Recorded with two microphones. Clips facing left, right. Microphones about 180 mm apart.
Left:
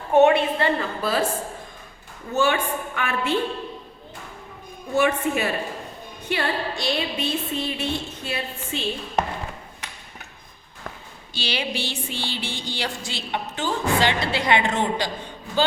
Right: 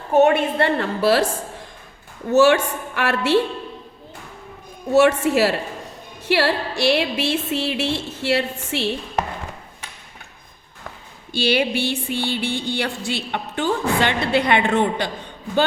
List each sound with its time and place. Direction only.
0.6 s a woman's voice: 75° right (ahead or behind)
2.3 s music: 80° right
4.9 s a woman's voice: 75° right (ahead or behind)
6.2 s music: 80° right
11.3 s a sound: 55° right (ahead or behind)